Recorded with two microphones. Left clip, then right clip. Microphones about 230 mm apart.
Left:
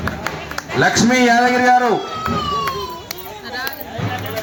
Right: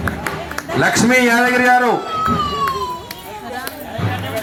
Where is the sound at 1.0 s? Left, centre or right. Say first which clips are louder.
Right 1 dB; right.